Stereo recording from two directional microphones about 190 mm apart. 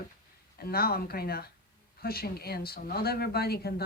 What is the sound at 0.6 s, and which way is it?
Speech, 50° left (ahead or behind).